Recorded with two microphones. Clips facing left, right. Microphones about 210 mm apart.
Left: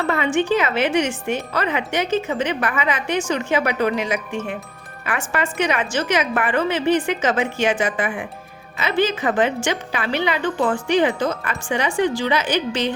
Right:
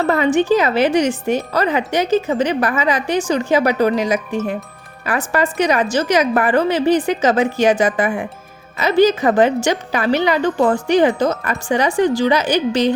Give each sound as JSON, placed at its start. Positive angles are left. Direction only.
{"t": 0.0, "sound": "a woman's voice", "side_deg": -40}